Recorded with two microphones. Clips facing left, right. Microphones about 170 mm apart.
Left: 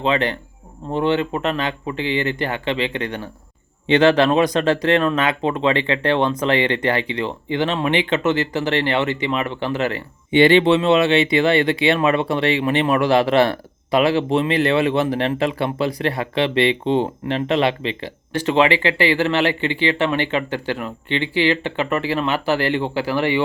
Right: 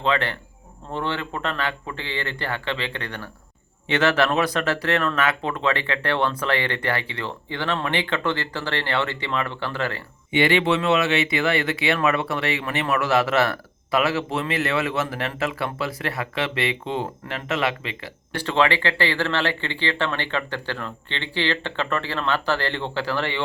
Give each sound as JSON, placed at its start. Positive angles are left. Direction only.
{"t": 0.0, "sound": "speech", "side_deg": 20}
{"t": 10.3, "sound": "speech", "side_deg": 30}